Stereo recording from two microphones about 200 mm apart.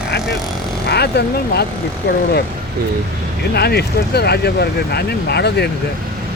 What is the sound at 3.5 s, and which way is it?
Speech, 55° left (ahead or behind).